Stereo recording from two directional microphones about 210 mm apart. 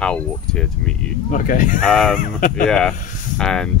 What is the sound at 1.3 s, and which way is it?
Speech, 40° left (ahead or behind).